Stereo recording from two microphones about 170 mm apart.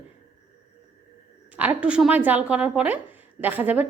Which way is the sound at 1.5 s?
10° right (ahead or behind).